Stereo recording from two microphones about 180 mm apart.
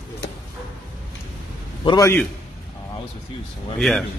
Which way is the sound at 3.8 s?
Centre (ahead or behind).